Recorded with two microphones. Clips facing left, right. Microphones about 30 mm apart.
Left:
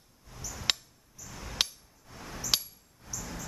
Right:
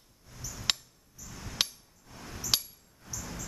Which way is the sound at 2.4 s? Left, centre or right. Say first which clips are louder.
Even; centre.